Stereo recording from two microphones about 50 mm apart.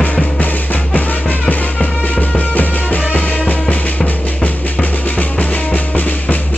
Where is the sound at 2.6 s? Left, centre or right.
Left.